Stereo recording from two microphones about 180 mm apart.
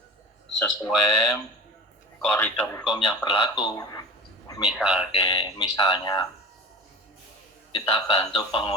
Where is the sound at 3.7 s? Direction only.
20° left (ahead or behind).